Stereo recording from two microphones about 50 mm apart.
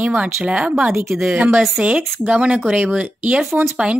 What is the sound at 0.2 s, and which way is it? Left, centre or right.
Speech, right.